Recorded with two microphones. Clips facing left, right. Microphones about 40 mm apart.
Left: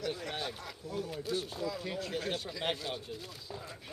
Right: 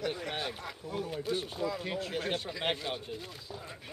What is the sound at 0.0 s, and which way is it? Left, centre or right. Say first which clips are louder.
Speech: right 2 dB; centre.